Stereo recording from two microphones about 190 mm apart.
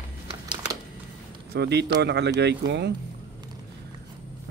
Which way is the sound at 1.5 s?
60° right (ahead or behind).